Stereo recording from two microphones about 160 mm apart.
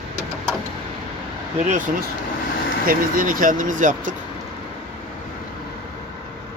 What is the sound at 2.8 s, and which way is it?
Speech, 60° right (ahead or behind).